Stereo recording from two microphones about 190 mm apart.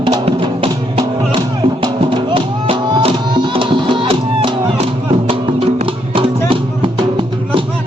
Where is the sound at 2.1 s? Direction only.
25° right (ahead or behind).